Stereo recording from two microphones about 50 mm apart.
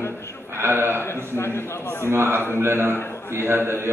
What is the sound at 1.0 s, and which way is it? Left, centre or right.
A man's voice, left.